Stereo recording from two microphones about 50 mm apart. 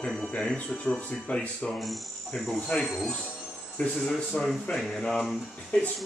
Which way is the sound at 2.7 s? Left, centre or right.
Left.